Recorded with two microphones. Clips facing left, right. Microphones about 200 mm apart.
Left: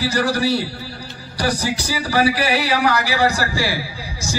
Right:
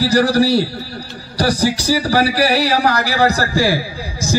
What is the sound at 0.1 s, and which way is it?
A man's voice, 35° right (ahead or behind).